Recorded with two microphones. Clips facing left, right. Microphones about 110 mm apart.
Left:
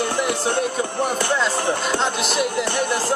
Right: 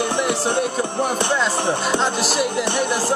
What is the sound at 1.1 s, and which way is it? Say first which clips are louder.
Speech: right 1 dB; 20° right (ahead or behind).